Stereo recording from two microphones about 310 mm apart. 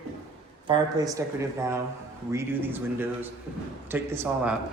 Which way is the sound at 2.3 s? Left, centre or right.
Centre.